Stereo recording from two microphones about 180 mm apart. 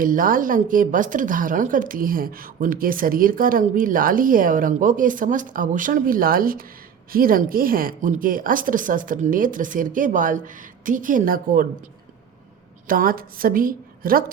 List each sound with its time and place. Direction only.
0.0 s a woman's voice: 50° right (ahead or behind)
12.9 s a woman's voice: 50° right (ahead or behind)